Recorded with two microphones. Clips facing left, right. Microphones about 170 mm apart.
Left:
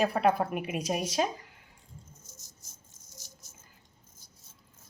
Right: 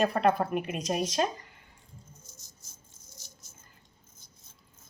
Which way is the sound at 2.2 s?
40° left (ahead or behind).